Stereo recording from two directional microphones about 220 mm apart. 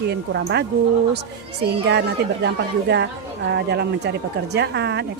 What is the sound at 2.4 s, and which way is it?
Speech, 50° right (ahead or behind).